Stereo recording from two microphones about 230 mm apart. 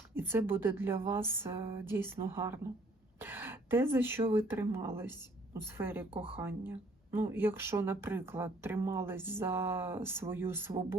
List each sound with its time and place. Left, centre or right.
0.1 s speech: centre